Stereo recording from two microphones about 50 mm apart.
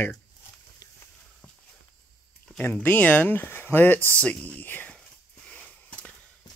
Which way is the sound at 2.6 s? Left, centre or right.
Left.